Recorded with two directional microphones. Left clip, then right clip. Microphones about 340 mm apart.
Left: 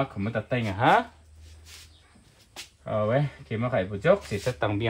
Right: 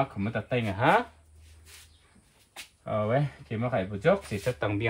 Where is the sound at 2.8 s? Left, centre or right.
Centre.